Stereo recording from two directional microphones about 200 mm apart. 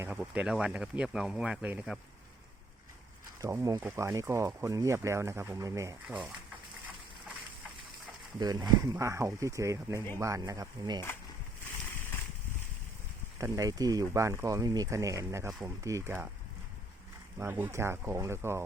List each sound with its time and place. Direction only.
0.0 s speech: 10° right (ahead or behind)
3.4 s speech: 15° right (ahead or behind)
8.4 s speech: 20° right (ahead or behind)
13.4 s speech: 15° right (ahead or behind)
17.3 s speech: 10° right (ahead or behind)